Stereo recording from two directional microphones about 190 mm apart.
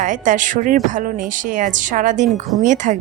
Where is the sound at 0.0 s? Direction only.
40° right (ahead or behind).